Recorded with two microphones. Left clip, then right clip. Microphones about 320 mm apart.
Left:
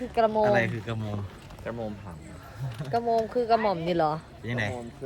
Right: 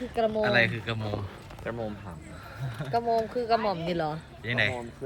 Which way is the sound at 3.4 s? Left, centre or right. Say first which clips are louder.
Left 2 dB; left.